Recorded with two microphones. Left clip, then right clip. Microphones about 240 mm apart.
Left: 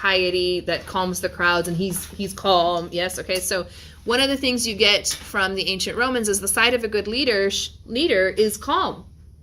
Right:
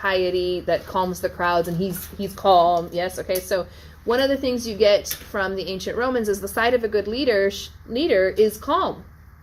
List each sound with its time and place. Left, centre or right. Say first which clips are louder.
0.0 s a woman's voice: left 2 dB; left